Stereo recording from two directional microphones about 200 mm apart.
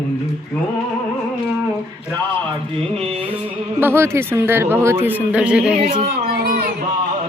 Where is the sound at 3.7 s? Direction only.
10° right (ahead or behind).